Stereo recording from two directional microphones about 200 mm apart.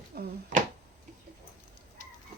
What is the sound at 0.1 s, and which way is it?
Cat, 50° right (ahead or behind).